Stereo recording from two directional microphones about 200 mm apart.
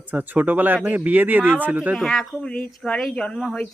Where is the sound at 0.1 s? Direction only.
10° right (ahead or behind).